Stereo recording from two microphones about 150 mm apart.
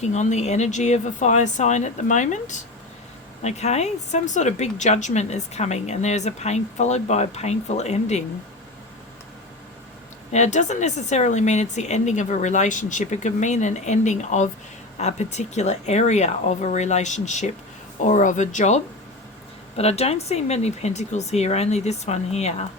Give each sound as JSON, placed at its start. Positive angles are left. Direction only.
{"t": 0.0, "sound": "speech", "side_deg": 50}
{"t": 10.3, "sound": "speech", "side_deg": 50}